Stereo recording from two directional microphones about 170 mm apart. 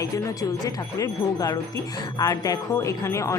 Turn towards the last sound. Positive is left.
turn(degrees=15)  # may be behind; listen again after turning